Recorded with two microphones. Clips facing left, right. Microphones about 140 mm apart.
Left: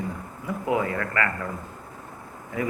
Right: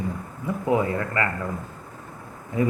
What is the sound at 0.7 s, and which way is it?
Speech, 25° right (ahead or behind).